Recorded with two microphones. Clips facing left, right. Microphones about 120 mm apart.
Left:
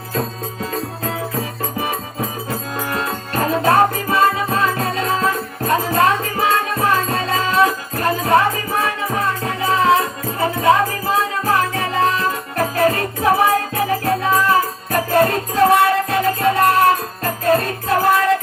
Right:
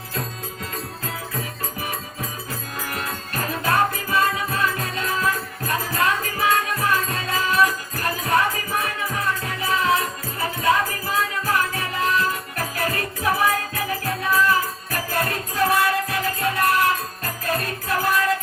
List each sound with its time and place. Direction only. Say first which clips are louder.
0.1 s music: left 8 dB; 40° left (ahead or behind)
1.8 s music: left 8 dB; 25° left (ahead or behind)